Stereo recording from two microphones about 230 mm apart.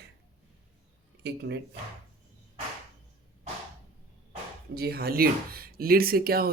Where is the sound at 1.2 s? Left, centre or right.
Right.